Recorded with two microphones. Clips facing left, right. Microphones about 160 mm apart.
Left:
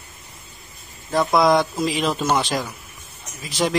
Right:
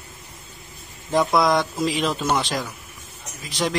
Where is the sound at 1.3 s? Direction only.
Centre (ahead or behind).